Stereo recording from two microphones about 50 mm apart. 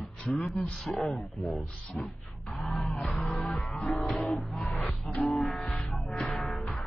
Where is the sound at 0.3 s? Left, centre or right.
Centre.